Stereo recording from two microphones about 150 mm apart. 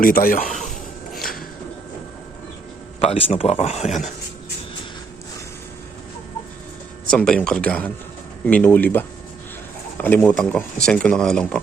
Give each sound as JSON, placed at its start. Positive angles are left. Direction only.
{"t": 0.0, "sound": "speech", "side_deg": 70}
{"t": 0.7, "sound": "a sound", "side_deg": 0}
{"t": 3.0, "sound": "speech", "side_deg": 40}
{"t": 7.1, "sound": "speech", "side_deg": 5}